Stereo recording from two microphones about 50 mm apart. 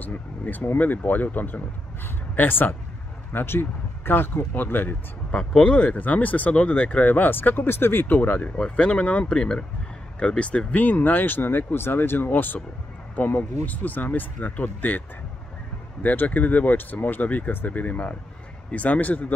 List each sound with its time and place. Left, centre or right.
0.0 s speech: left
3.3 s speech: left
5.3 s speech: centre; by 8.5 s left
8.7 s speech: left
10.8 s speech: left